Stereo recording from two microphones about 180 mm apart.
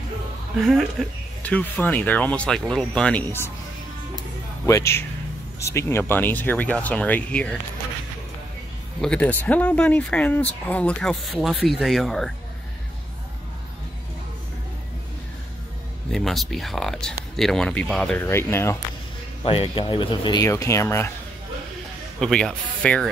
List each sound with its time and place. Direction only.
0.6 s speech: centre (ahead or behind)
4.6 s speech: 15° left (ahead or behind)
9.0 s speech: 5° left (ahead or behind)
16.1 s speech: centre (ahead or behind)
18.2 s speech: 15° left (ahead or behind)
19.4 s speech: 30° left (ahead or behind); by 21.1 s 15° left (ahead or behind)
22.2 s speech: 5° left (ahead or behind)